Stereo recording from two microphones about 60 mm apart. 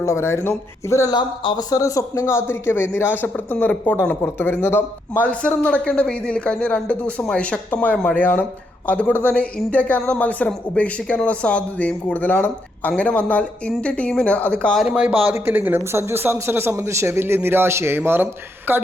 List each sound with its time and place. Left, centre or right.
0.0 s speech: left
1.5 s a man's voice: left
5.2 s speech: left
14.9 s speech: centre
15.2 s speech: right
15.8 s speech: right